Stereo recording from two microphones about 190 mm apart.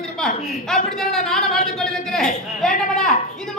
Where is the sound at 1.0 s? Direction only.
Centre (ahead or behind).